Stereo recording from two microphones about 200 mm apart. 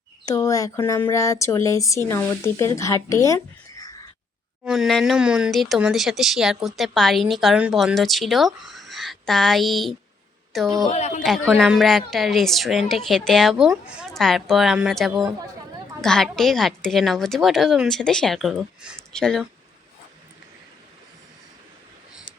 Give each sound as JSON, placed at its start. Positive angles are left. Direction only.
{"t": 0.3, "sound": "speech", "side_deg": 15}
{"t": 4.6, "sound": "speech", "side_deg": 0}
{"t": 10.8, "sound": "speech", "side_deg": 35}
{"t": 11.2, "sound": "speech", "side_deg": 0}